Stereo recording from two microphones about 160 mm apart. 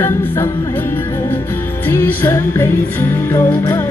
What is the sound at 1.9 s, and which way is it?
Music, 15° left (ahead or behind).